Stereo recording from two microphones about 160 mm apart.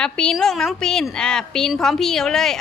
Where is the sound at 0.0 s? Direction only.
5° left (ahead or behind).